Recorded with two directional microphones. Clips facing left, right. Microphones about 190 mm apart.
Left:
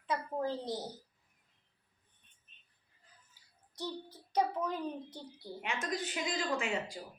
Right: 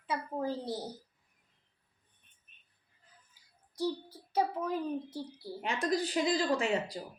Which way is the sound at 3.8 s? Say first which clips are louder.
Right 7 dB; 10° right (ahead or behind).